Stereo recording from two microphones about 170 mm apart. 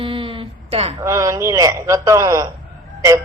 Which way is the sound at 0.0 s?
30° right (ahead or behind).